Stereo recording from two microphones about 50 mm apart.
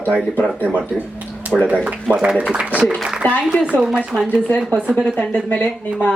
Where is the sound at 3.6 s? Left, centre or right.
Right.